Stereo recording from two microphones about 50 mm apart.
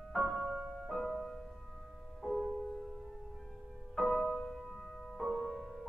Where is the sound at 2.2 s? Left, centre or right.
Centre.